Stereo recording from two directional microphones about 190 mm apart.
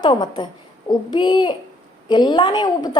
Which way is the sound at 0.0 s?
25° left (ahead or behind).